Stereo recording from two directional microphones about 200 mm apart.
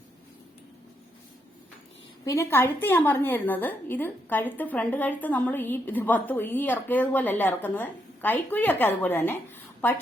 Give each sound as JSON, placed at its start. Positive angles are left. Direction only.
{"t": 2.2, "sound": "a woman's voice", "side_deg": 15}